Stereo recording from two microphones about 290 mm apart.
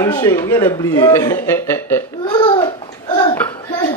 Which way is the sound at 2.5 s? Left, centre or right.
Centre.